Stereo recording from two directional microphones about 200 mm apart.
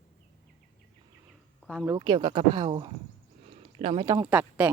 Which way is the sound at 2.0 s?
25° right (ahead or behind).